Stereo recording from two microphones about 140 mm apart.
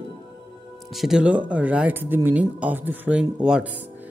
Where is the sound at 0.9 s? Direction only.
5° right (ahead or behind).